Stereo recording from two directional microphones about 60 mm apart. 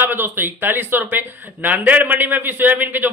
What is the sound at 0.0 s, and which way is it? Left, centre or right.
Speech, right.